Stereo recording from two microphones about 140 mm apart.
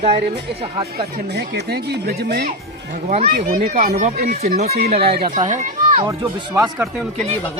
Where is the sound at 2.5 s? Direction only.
65° right (ahead or behind).